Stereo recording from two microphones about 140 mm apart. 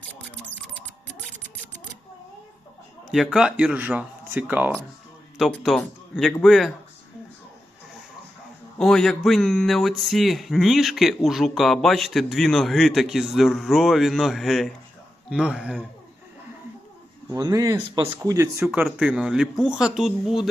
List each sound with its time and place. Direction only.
0.1 s typing: 10° left (ahead or behind)
3.1 s speech: centre (ahead or behind)
5.4 s speech: centre (ahead or behind)
8.8 s speech: 5° left (ahead or behind)
17.2 s speech: 30° right (ahead or behind)
18.9 s speech: 5° right (ahead or behind)